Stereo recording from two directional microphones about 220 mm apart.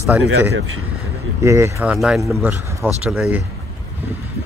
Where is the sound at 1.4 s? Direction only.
15° right (ahead or behind).